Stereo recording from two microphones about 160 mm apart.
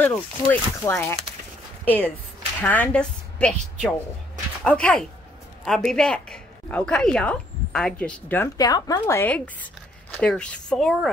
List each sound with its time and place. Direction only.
0.0 s a woman's voice: 10° left (ahead or behind)
4.6 s a woman's voice: 5° left (ahead or behind)
8.5 s a woman's voice: 25° left (ahead or behind); by 11.1 s centre (ahead or behind)